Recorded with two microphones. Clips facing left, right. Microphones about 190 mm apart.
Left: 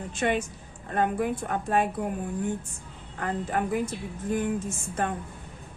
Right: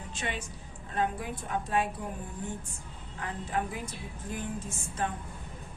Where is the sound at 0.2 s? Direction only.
50° left (ahead or behind).